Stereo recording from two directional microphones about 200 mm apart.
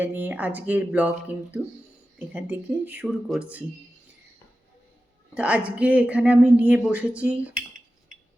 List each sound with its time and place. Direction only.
0.0 s speech: 10° right (ahead or behind)
5.3 s speech: 5° right (ahead or behind)